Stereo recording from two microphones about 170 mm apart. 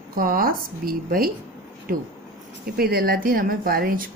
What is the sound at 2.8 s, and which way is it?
Speech, 65° right (ahead or behind).